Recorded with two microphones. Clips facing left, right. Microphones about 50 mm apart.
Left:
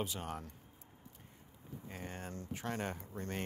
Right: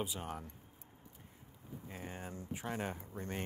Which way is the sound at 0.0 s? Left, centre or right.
Centre.